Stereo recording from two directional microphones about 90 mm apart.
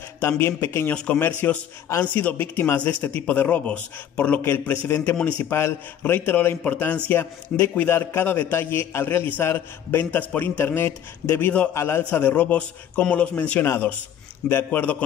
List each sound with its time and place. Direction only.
0.3 s a man's voice: 25° left (ahead or behind)
0.9 s a man's voice: 10° left (ahead or behind)
1.4 s a man's voice: 25° left (ahead or behind)
4.4 s a man's voice: 25° left (ahead or behind)
12.0 s a man's voice: 15° left (ahead or behind)